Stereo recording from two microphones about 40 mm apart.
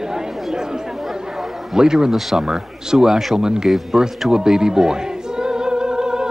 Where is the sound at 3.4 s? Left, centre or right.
Centre.